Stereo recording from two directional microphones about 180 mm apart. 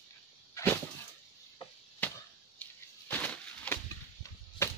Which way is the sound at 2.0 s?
10° left (ahead or behind).